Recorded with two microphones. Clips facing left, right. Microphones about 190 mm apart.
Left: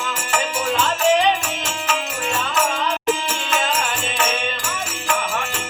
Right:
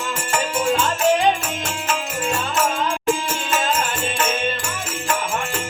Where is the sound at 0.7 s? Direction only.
45° right (ahead or behind).